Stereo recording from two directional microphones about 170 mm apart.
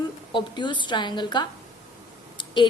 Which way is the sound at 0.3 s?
25° left (ahead or behind).